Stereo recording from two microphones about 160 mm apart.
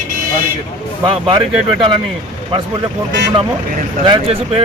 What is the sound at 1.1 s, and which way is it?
Speech, 30° right (ahead or behind).